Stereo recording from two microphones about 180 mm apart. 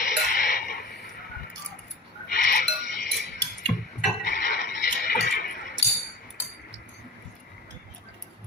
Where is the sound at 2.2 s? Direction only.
65° left (ahead or behind).